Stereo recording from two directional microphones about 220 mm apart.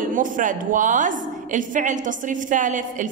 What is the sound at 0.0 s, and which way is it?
A woman's voice, 35° right (ahead or behind).